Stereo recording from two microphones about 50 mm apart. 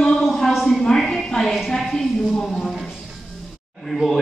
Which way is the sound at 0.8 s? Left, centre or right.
Centre.